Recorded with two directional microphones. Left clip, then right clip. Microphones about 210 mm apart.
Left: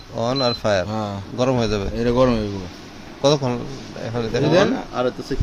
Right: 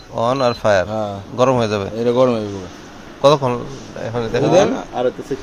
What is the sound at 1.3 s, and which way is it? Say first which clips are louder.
Speech: right 5 dB; 5° left (ahead or behind).